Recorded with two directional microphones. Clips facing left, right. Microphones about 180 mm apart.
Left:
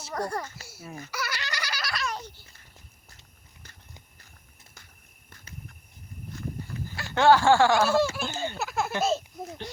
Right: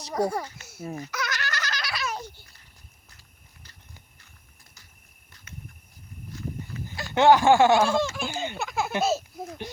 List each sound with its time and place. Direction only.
0.1 s a child's voice: 5° right (ahead or behind)
0.8 s speech: 30° right (ahead or behind)
1.1 s baby laughter: 10° left (ahead or behind)
1.8 s a sound: centre (ahead or behind)
6.8 s speech: 15° right (ahead or behind)
7.9 s speech: 10° left (ahead or behind)
8.3 s a sound: 15° right (ahead or behind)
8.5 s baby laughter: centre (ahead or behind)
9.0 s speech: 5° right (ahead or behind)